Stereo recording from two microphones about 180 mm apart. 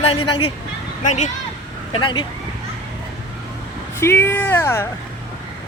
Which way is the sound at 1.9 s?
25° left (ahead or behind).